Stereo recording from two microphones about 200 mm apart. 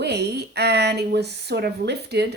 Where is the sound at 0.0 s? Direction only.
55° right (ahead or behind).